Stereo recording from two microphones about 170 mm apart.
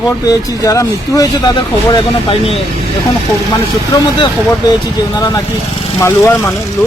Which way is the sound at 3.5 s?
25° left (ahead or behind).